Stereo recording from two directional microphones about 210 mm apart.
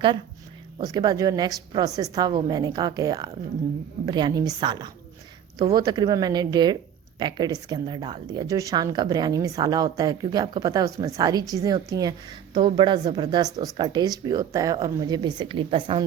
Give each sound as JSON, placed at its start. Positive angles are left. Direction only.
{"t": 0.8, "sound": "a woman's voice", "side_deg": -20}